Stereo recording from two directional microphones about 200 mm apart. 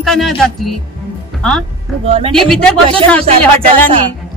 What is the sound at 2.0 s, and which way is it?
Speech, 30° right (ahead or behind).